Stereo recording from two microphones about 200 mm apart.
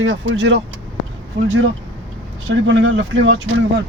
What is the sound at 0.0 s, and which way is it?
Speech, 65° right (ahead or behind).